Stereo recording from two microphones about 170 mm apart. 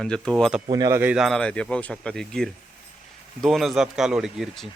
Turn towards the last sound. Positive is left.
turn(degrees=0)  # may be behind; listen again after turning